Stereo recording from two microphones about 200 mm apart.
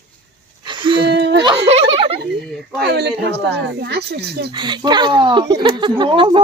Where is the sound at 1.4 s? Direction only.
25° right (ahead or behind).